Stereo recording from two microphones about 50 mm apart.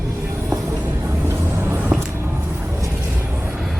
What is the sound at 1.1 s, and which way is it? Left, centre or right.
Music, right.